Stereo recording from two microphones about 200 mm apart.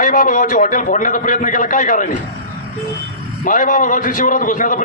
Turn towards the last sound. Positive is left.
turn(degrees=40)  # may be behind; listen again after turning